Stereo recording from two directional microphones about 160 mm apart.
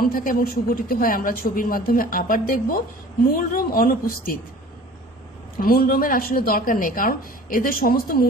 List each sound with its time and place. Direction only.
0.0 s speech: 60° left (ahead or behind)
5.6 s speech: 65° left (ahead or behind)